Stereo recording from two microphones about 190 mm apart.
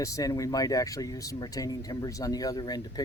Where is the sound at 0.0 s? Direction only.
20° left (ahead or behind).